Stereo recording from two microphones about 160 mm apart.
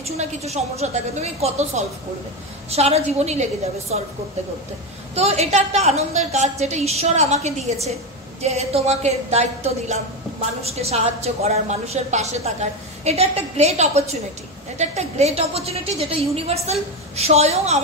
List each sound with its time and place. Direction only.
0.0 s a woman's voice: 45° right (ahead or behind)
5.1 s a woman's voice: 40° right (ahead or behind)